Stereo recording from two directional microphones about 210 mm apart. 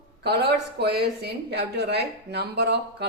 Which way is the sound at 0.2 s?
50° right (ahead or behind).